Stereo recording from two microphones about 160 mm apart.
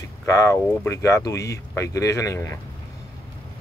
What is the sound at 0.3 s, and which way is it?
Speech, 20° left (ahead or behind).